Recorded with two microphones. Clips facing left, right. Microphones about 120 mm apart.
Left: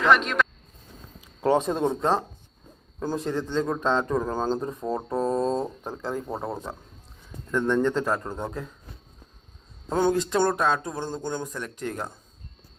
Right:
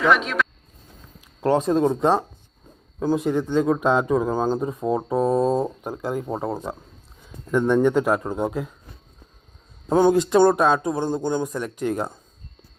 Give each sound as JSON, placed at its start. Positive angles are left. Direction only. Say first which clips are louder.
{"t": 0.0, "sound": "speech", "louder": "right 1 dB", "side_deg": 0}
{"t": 1.5, "sound": "speech", "louder": "right 3 dB", "side_deg": 0}
{"t": 9.9, "sound": "speech", "louder": "right 6 dB", "side_deg": -15}